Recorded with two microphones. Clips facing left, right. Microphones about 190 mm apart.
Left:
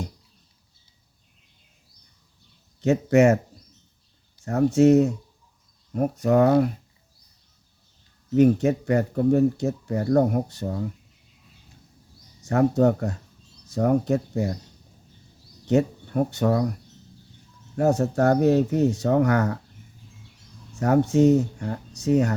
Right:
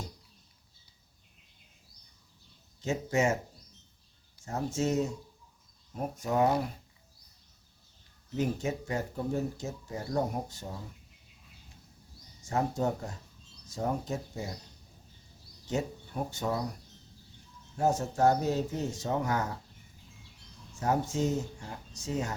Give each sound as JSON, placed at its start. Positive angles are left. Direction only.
{"t": 2.8, "sound": "speech", "side_deg": 65}
{"t": 4.4, "sound": "speech", "side_deg": 65}
{"t": 8.4, "sound": "speech", "side_deg": 65}
{"t": 12.5, "sound": "speech", "side_deg": 65}
{"t": 15.6, "sound": "speech", "side_deg": 65}
{"t": 17.7, "sound": "speech", "side_deg": 65}
{"t": 20.7, "sound": "speech", "side_deg": 65}